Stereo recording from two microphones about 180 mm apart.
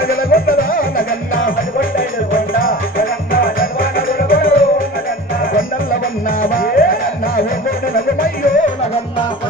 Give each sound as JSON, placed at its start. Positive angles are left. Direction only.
{"t": 0.1, "sound": "music", "side_deg": 55}